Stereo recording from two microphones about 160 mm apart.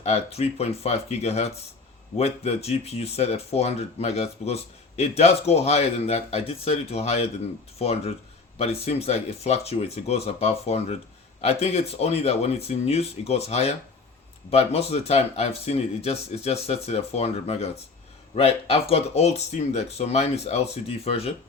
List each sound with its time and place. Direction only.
0.0 s speech: 40° left (ahead or behind)